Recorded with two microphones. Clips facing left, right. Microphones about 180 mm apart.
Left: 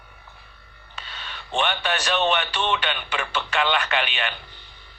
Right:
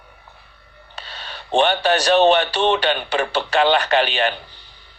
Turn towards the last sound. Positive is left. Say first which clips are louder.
# right 8 dB
turn(degrees=-35)  # may be behind; listen again after turning